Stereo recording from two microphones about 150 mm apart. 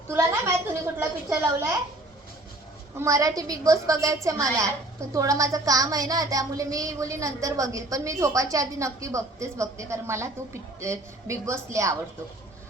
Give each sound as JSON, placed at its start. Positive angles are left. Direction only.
{"t": 0.1, "sound": "a sound", "side_deg": -20}
{"t": 0.9, "sound": "a woman's voice", "side_deg": -15}
{"t": 3.0, "sound": "a woman's voice", "side_deg": -20}